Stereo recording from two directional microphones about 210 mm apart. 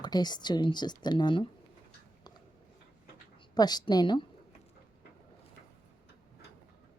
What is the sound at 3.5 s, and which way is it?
Speech, 20° left (ahead or behind).